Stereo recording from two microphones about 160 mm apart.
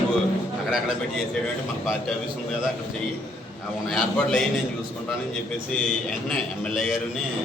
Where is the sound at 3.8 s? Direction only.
5° left (ahead or behind).